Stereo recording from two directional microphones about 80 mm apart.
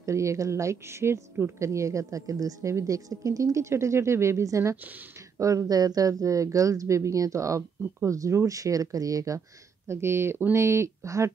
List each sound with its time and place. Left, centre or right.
0.0 s a woman's voice: right
9.8 s a woman's voice: right